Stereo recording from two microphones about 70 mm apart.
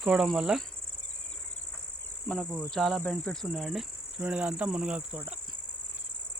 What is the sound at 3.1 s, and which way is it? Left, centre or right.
Speech, centre.